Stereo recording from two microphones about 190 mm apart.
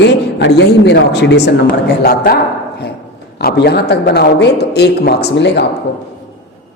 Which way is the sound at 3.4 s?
55° left (ahead or behind).